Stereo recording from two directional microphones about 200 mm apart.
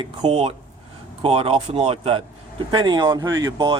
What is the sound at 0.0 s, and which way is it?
A man's voice, 30° right (ahead or behind).